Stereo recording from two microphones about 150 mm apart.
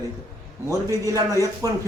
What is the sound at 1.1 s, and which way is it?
Speech, 20° right (ahead or behind).